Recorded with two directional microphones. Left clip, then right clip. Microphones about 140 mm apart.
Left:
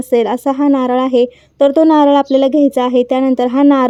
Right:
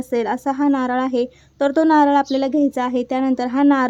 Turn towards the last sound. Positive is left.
turn(degrees=40)  # may be behind; listen again after turning